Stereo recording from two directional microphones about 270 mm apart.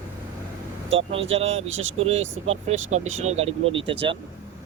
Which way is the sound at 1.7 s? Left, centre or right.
Right.